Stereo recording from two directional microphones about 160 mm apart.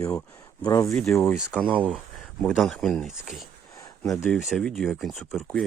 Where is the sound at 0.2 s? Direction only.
20° left (ahead or behind).